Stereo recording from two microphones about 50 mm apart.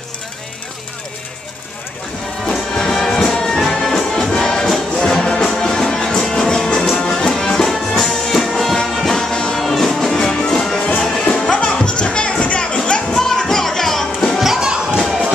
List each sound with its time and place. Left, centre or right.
2.5 s music: centre
13.1 s music: centre
14.4 s children playing: centre
15.0 s a sound: centre